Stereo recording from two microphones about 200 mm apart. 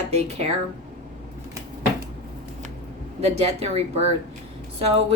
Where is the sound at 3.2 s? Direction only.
30° right (ahead or behind).